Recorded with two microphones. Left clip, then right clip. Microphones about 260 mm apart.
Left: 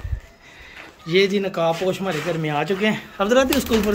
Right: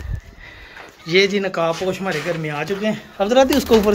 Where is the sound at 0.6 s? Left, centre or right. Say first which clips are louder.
Left 1 dB; centre.